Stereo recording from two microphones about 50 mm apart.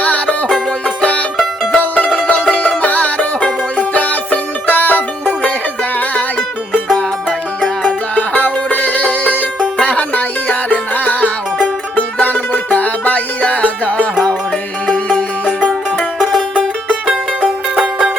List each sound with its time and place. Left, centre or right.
0.0 s music: left
1.7 s music: left
7.9 s music: left
16.1 s music: centre
17.1 s music: centre